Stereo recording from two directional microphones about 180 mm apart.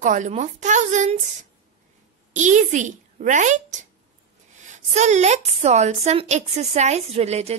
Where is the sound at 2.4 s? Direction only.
40° right (ahead or behind).